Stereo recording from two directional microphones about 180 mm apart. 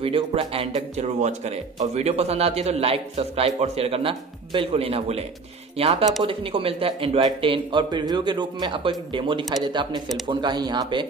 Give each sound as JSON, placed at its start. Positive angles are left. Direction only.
{"t": 0.0, "sound": "a man's voice", "side_deg": -30}